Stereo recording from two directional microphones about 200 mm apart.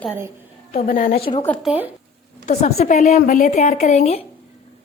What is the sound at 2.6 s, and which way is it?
Speech, 35° left (ahead or behind).